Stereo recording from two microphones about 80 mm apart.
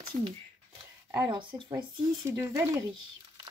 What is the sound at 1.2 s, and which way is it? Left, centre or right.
Speech, right.